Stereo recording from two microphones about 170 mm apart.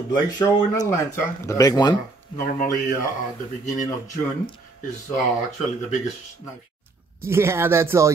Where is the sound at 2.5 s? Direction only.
50° left (ahead or behind).